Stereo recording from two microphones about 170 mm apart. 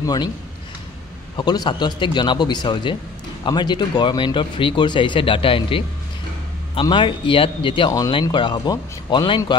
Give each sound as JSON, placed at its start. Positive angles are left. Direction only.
{"t": 0.0, "sound": "a man's voice", "side_deg": 25}
{"t": 1.3, "sound": "speech", "side_deg": 25}